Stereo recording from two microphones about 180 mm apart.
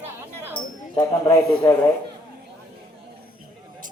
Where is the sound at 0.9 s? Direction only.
20° left (ahead or behind).